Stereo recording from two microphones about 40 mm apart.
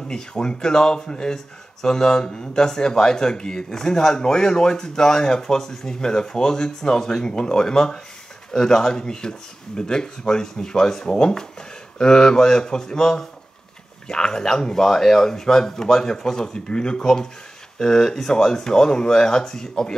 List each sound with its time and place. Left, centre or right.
0.1 s speech: centre